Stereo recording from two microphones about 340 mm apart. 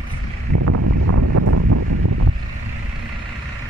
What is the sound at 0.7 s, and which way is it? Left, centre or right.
Wind noise, right.